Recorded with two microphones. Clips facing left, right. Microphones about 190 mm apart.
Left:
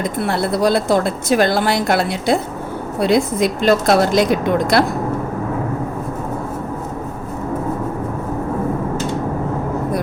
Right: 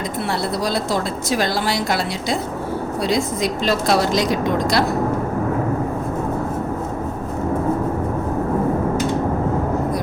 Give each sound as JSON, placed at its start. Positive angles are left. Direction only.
{"t": 0.3, "sound": "speech", "side_deg": 55}